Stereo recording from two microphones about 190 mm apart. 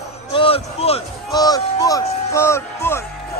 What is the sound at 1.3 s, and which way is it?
Music, 20° left (ahead or behind).